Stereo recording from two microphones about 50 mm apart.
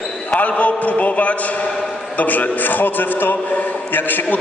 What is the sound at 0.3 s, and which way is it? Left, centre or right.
A man's voice, left.